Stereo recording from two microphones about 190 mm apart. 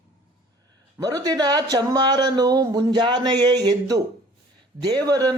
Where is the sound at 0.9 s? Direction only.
20° right (ahead or behind).